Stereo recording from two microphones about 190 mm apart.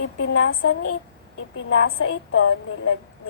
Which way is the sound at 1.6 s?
90° left.